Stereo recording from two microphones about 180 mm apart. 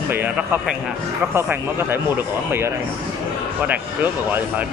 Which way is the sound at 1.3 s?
10° right (ahead or behind).